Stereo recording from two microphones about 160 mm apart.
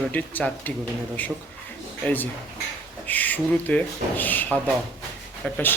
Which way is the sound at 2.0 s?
10° left (ahead or behind).